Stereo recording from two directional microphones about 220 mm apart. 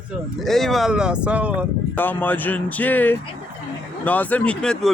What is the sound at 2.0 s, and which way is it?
Speech, 10° left (ahead or behind).